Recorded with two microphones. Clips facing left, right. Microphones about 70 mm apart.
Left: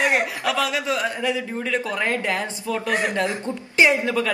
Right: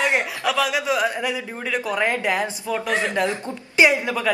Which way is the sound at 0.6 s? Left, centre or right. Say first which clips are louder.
Right 2 dB; centre.